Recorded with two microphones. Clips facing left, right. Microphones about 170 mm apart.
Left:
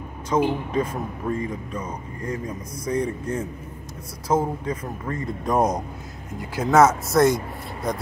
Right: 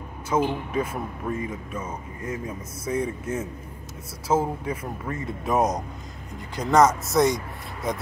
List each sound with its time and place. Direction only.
0.3 s speech: 10° right (ahead or behind)